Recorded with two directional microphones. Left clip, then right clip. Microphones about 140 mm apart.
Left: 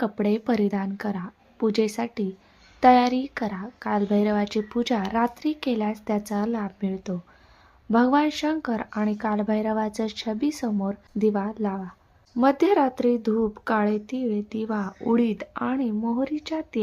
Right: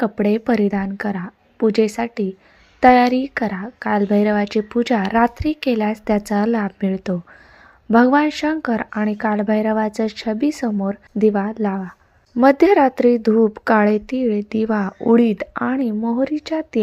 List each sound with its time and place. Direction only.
0.0 s speech: 25° right (ahead or behind)